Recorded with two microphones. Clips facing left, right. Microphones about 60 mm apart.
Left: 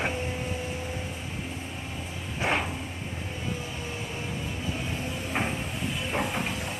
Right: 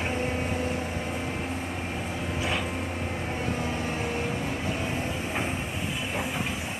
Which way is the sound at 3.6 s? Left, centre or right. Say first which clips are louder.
Right 6 dB; right.